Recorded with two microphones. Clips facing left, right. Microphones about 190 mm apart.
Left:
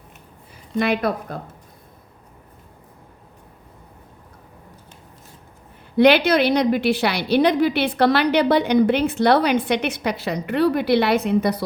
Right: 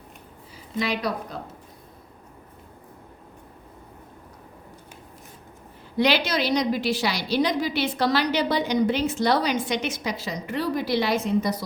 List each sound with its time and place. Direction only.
0.8 s a woman's voice: 55° left (ahead or behind)
6.0 s a woman's voice: 60° left (ahead or behind)